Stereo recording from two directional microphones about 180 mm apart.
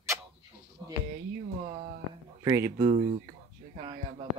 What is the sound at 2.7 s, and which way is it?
Speech, 40° right (ahead or behind).